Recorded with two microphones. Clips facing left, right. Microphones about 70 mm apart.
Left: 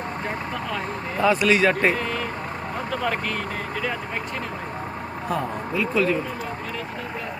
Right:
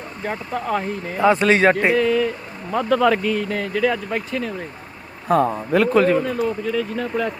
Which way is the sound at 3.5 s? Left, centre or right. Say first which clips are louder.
Right 7 dB; right.